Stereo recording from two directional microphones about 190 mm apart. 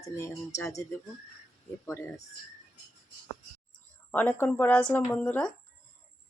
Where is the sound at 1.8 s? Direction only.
10° left (ahead or behind).